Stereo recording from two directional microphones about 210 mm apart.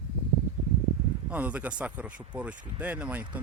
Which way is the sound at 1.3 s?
5° right (ahead or behind).